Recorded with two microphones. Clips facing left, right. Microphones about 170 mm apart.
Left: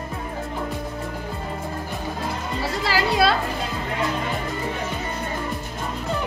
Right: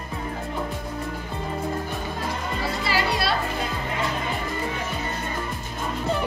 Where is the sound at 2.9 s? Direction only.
90° left.